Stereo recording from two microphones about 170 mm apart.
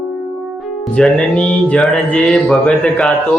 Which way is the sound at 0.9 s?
5° left (ahead or behind).